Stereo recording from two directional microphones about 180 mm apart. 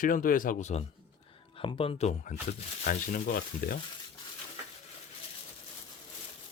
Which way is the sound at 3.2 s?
55° left (ahead or behind).